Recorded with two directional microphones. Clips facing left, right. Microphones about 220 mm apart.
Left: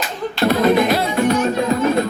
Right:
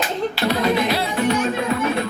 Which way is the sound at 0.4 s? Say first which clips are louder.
Left 6 dB; 50° left (ahead or behind).